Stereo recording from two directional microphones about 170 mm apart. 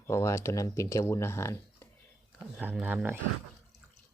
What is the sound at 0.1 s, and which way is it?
Speech, 15° left (ahead or behind).